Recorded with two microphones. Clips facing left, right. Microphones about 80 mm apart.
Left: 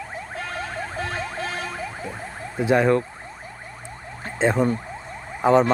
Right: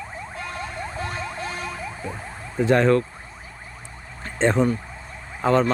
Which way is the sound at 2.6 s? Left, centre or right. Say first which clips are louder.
Right 1 dB; centre.